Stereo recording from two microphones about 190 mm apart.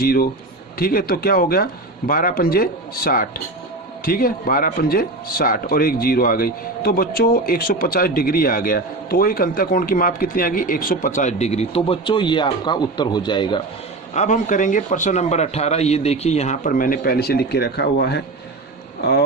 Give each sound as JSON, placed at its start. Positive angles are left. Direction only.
{"t": 0.0, "sound": "speech", "side_deg": 50}
{"t": 14.1, "sound": "a man's voice", "side_deg": 40}